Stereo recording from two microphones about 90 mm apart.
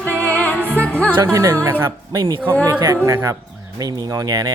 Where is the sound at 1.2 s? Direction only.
35° right (ahead or behind).